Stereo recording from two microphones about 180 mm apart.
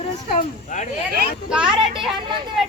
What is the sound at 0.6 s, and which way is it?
Speech, 45° left (ahead or behind).